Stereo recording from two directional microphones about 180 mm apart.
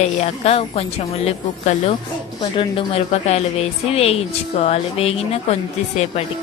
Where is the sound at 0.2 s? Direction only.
35° left (ahead or behind).